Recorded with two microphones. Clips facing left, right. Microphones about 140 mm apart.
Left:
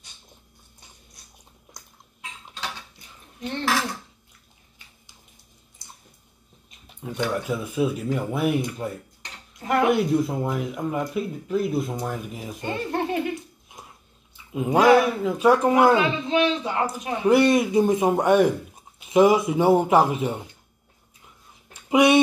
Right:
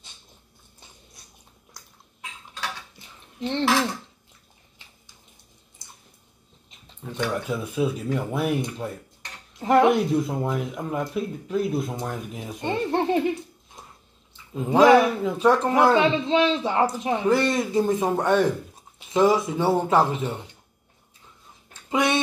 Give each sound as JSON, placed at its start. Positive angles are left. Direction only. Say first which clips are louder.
{"t": 3.3, "sound": "cutlery", "louder": "right 4 dB", "side_deg": -25}
{"t": 6.9, "sound": "speech", "louder": "left 1 dB", "side_deg": 10}
{"t": 9.6, "sound": "speech", "louder": "right 4 dB", "side_deg": -25}
{"t": 9.8, "sound": "speech", "louder": "even", "side_deg": 0}
{"t": 12.6, "sound": "a man's voice", "louder": "right 3 dB", "side_deg": -30}
{"t": 14.3, "sound": "a sound", "louder": "left 1 dB", "side_deg": 10}
{"t": 15.0, "sound": "speech", "louder": "even", "side_deg": 5}
{"t": 16.0, "sound": "a man's voice", "louder": "right 2 dB", "side_deg": -25}
{"t": 17.3, "sound": "speech", "louder": "left 6 dB", "side_deg": 15}
{"t": 21.7, "sound": "a sound", "louder": "left 6 dB", "side_deg": 15}